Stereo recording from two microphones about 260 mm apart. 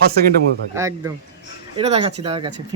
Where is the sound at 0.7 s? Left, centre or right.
Centre.